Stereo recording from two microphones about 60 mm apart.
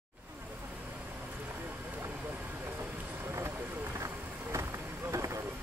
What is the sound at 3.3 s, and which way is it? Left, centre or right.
Vehicle, right.